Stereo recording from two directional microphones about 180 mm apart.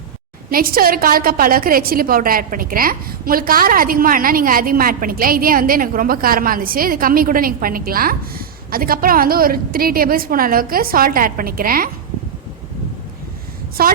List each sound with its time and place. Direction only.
0.5 s a woman's voice: 55° right (ahead or behind)
13.8 s a woman's voice: 55° right (ahead or behind)